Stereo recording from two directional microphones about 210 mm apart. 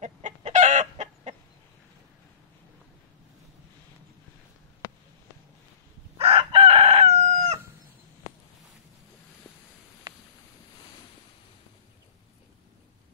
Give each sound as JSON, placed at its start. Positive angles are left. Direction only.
{"t": 0.0, "sound": "chicken", "side_deg": -35}
{"t": 6.1, "sound": "chicken", "side_deg": -25}
{"t": 10.1, "sound": "a sound", "side_deg": -15}